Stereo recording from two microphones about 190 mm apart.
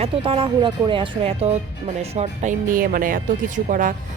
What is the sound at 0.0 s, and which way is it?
A woman's voice, 30° right (ahead or behind).